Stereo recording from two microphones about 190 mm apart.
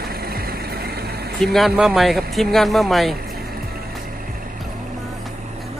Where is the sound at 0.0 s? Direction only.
55° right (ahead or behind).